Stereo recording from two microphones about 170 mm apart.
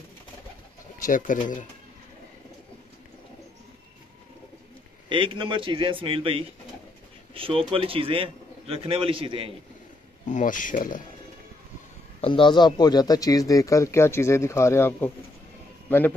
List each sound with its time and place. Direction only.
1.0 s speech: 50° left (ahead or behind)
5.1 s a man's voice: 30° right (ahead or behind)
10.2 s speech: 50° left (ahead or behind)
12.2 s speech: 30° left (ahead or behind); by 15.0 s 15° left (ahead or behind)